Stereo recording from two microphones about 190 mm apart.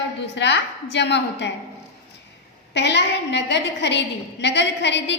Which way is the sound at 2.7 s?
65° left (ahead or behind).